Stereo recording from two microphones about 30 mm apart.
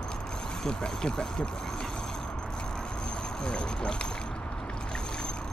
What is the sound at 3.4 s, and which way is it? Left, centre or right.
Speech, left.